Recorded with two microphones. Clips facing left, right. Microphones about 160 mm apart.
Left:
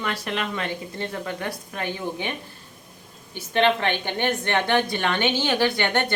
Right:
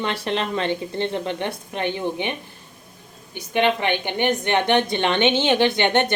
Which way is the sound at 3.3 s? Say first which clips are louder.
Even; 15° right (ahead or behind).